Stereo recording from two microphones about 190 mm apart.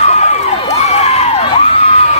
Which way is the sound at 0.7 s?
35° left (ahead or behind).